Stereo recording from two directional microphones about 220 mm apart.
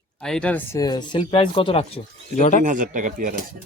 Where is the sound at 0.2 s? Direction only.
5° left (ahead or behind); by 2.6 s 35° left (ahead or behind).